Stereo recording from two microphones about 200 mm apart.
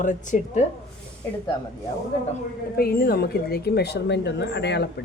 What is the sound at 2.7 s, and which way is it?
A woman's voice, 50° left (ahead or behind).